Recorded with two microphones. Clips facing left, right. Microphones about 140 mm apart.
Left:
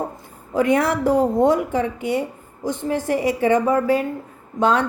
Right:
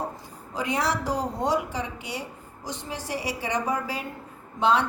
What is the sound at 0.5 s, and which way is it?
A woman's voice, 55° left (ahead or behind).